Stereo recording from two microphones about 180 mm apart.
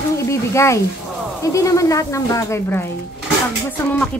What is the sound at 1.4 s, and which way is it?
Speech, 15° left (ahead or behind).